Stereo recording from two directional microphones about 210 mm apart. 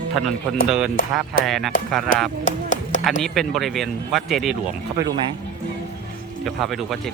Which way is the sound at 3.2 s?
Centre (ahead or behind).